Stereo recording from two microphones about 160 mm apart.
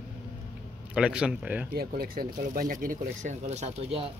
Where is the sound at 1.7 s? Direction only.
65° right (ahead or behind); by 4.1 s 40° right (ahead or behind).